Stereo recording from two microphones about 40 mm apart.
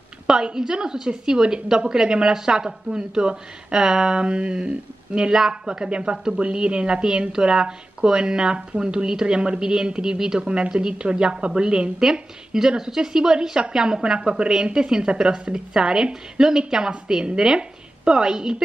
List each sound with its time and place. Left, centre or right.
0.3 s a woman's voice: centre
6.1 s speech: centre
6.4 s a woman's voice: right